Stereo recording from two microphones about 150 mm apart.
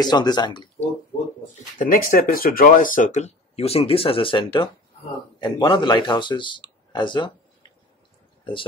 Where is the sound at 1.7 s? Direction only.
65° left (ahead or behind); by 7.3 s 30° left (ahead or behind).